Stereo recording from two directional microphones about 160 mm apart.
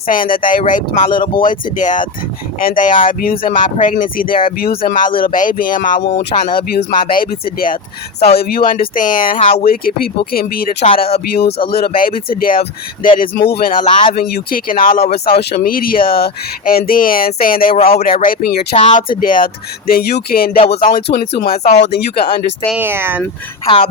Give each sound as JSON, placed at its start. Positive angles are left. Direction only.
{"t": 0.1, "sound": "speech", "side_deg": 60}
{"t": 0.6, "sound": "speech", "side_deg": 50}
{"t": 4.5, "sound": "speech", "side_deg": 70}
{"t": 8.2, "sound": "speech", "side_deg": 85}
{"t": 11.9, "sound": "speech", "side_deg": 65}
{"t": 13.4, "sound": "speech", "side_deg": 75}
{"t": 19.9, "sound": "speech", "side_deg": 85}
{"t": 21.8, "sound": "speech", "side_deg": 90}
{"t": 22.7, "sound": "speech", "side_deg": -15}